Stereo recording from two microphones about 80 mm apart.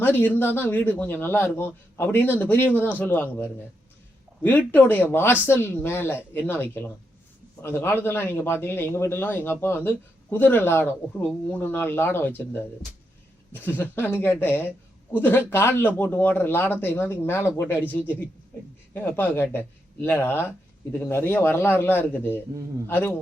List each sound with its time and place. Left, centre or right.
0.0 s speech: left
4.4 s speech: left
18.9 s speech: left